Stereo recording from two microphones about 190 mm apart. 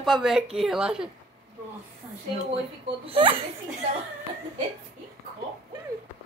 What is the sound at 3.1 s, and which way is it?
Speech, 25° right (ahead or behind).